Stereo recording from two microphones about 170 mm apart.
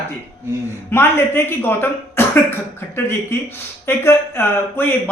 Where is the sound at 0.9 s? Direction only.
15° left (ahead or behind).